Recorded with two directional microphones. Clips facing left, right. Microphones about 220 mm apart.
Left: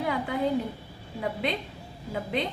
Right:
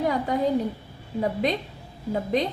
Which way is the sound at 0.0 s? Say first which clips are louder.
Right 5 dB; 40° right (ahead or behind).